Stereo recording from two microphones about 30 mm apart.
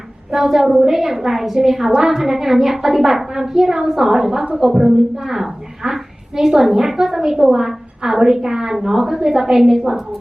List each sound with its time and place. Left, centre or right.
0.3 s a woman's voice: centre